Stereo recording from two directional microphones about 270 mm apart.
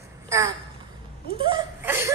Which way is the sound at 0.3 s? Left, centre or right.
Centre.